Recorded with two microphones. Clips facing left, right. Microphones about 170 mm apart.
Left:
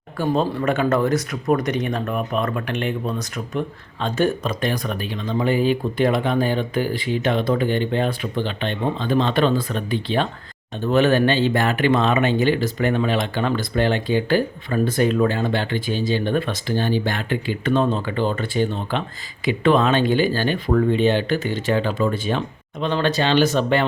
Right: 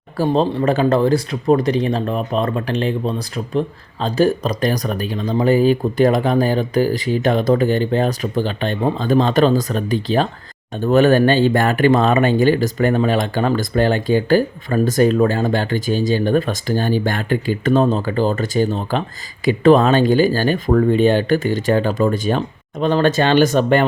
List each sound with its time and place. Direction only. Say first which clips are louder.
0.2 s speech: right 4 dB; 35° right (ahead or behind); by 23.8 s 50° right (ahead or behind)